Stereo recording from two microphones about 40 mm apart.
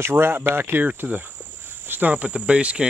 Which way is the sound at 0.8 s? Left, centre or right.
Right.